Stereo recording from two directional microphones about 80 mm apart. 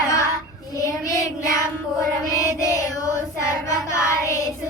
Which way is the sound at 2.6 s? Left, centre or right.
Left.